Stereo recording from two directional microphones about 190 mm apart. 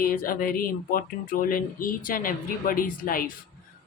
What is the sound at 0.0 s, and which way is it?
Speech, 50° left (ahead or behind).